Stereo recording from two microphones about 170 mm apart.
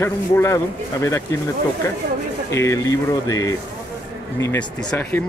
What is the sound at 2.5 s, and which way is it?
Speech, 15° left (ahead or behind).